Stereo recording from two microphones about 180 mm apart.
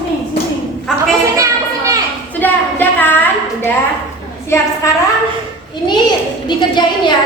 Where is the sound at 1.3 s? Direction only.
15° right (ahead or behind).